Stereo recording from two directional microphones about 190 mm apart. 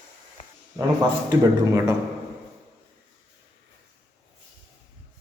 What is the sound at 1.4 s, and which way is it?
Speech, 15° right (ahead or behind).